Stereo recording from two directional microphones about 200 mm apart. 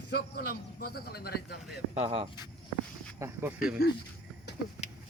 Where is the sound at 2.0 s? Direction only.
30° right (ahead or behind).